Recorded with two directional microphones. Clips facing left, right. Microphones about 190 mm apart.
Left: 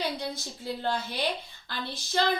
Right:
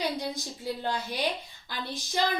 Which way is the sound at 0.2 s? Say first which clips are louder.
Right 1 dB; 15° right (ahead or behind).